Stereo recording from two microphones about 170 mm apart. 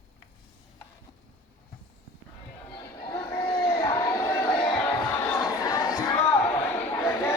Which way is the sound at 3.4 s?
35° left (ahead or behind).